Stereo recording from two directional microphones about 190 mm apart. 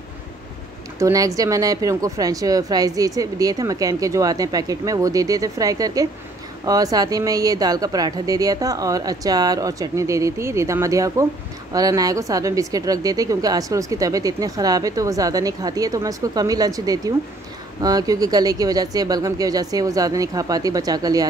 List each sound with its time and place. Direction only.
0.9 s a woman's voice: 15° right (ahead or behind)